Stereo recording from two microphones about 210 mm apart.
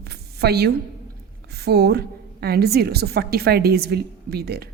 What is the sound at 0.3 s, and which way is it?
A woman's voice, 50° right (ahead or behind).